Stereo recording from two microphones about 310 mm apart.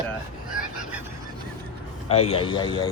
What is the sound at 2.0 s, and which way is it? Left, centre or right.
Speech, centre.